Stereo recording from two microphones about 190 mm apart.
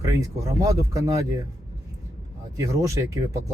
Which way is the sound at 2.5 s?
15° right (ahead or behind).